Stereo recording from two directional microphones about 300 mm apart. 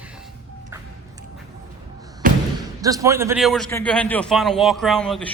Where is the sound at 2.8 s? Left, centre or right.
Centre.